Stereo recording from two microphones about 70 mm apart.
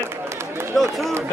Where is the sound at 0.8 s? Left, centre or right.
Centre.